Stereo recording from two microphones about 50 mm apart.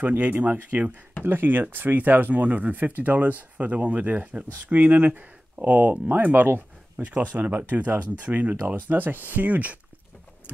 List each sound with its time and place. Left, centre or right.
0.0 s speech: right
1.2 s speech: right